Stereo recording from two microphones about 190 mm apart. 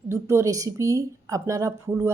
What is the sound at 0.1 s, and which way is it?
A woman's voice, 15° right (ahead or behind).